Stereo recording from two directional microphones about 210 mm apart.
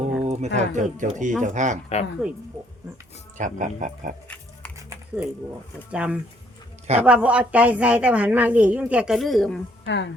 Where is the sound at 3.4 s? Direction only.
35° right (ahead or behind).